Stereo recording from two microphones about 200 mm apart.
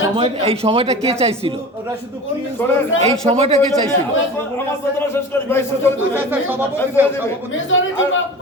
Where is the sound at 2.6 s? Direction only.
10° left (ahead or behind).